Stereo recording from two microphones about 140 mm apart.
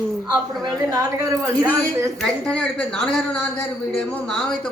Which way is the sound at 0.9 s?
25° right (ahead or behind).